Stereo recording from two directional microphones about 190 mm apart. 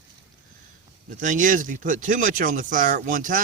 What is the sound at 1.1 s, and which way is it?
Speech, 40° right (ahead or behind).